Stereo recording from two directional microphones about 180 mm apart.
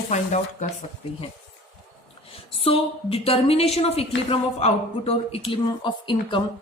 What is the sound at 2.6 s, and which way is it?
A woman's voice, 30° left (ahead or behind).